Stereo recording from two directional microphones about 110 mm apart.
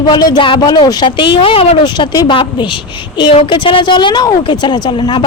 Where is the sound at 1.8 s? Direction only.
40° left (ahead or behind).